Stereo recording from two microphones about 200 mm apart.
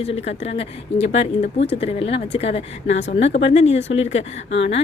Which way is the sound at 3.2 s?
65° left (ahead or behind).